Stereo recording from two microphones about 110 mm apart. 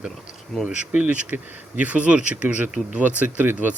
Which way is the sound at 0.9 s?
10° right (ahead or behind).